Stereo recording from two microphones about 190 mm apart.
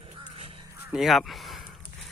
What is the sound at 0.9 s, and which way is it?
Speech, centre (ahead or behind).